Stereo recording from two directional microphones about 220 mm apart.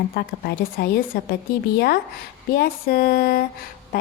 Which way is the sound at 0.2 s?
45° left (ahead or behind).